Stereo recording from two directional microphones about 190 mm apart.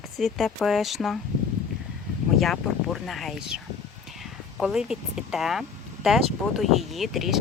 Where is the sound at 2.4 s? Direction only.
Centre (ahead or behind).